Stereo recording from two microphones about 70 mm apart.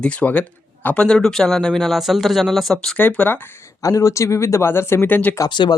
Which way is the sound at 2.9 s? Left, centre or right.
Left.